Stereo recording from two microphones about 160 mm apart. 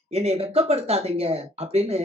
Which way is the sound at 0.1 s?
40° right (ahead or behind).